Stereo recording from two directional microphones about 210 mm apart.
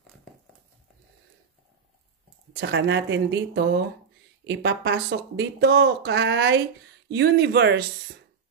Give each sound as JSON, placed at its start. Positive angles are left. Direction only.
{"t": 2.5, "sound": "speech", "side_deg": -55}